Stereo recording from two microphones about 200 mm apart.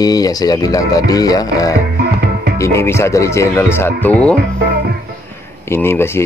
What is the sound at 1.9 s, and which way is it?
Music, 55° right (ahead or behind).